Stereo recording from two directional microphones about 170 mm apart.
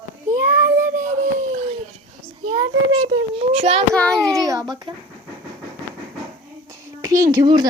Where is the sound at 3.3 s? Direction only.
40° right (ahead or behind).